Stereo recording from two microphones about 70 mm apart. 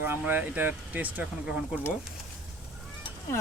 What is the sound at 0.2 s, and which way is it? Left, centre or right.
Speech, right.